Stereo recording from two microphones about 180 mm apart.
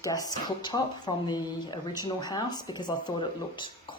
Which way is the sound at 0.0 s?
20° left (ahead or behind).